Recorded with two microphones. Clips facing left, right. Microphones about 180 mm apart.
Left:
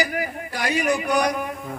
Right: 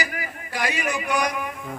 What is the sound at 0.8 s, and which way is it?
Speech, 35° left (ahead or behind).